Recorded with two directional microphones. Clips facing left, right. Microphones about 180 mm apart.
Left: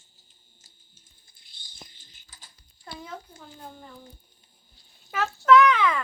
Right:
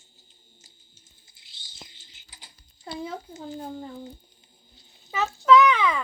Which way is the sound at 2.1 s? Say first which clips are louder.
Right 2 dB; 25° right (ahead or behind).